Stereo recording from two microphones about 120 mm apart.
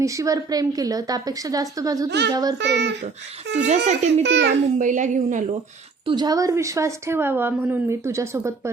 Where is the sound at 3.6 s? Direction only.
75° right (ahead or behind).